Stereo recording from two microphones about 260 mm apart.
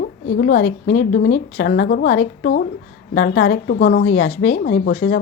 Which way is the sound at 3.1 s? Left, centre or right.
Left.